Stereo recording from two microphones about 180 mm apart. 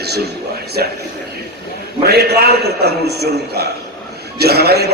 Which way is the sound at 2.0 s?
60° right (ahead or behind).